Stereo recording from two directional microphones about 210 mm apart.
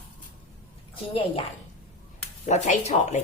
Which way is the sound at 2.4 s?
35° left (ahead or behind).